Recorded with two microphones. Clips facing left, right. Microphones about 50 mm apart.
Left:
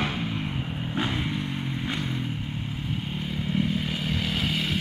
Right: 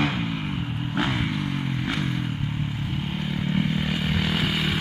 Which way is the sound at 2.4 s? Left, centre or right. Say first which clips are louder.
Right 4 dB; centre.